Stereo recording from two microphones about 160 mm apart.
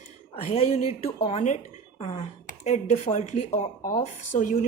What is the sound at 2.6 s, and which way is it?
Speech, 45° left (ahead or behind).